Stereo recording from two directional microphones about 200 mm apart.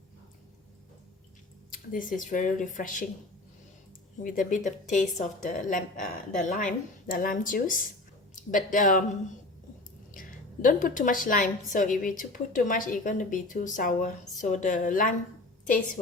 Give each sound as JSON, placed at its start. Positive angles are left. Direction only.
{"t": 1.7, "sound": "a woman's voice", "side_deg": 45}
{"t": 4.2, "sound": "a woman's voice", "side_deg": 40}
{"t": 10.2, "sound": "a woman's voice", "side_deg": 40}